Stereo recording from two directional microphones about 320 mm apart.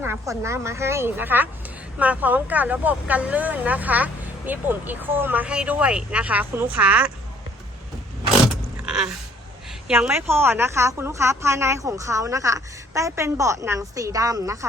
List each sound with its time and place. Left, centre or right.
0.0 s a woman's voice: centre
8.9 s a sound: centre
9.8 s a woman's voice: centre